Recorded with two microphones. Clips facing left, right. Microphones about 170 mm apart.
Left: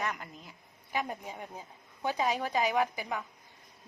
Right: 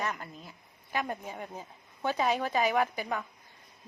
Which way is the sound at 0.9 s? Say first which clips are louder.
Right 1 dB; 15° left (ahead or behind).